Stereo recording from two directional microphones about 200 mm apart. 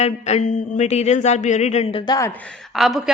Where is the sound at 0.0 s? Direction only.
35° left (ahead or behind); by 2.3 s 20° left (ahead or behind).